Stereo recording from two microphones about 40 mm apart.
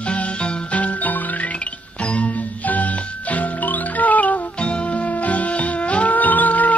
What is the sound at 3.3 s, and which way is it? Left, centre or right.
Music, left.